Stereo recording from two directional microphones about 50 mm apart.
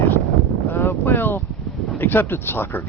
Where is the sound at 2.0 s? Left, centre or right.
Left.